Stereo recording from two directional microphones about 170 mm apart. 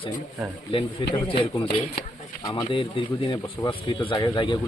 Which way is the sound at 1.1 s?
30° left (ahead or behind).